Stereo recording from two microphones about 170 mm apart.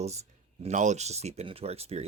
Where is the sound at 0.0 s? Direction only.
40° right (ahead or behind).